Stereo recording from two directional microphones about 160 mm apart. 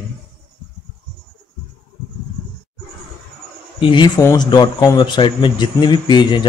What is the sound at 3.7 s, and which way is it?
Speech, 30° left (ahead or behind).